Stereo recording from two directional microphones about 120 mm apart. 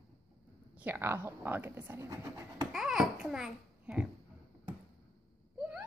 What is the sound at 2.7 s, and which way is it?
Babbling, 5° right (ahead or behind).